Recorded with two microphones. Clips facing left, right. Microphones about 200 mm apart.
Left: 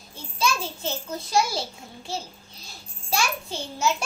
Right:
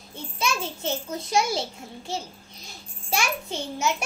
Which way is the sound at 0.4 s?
20° right (ahead or behind).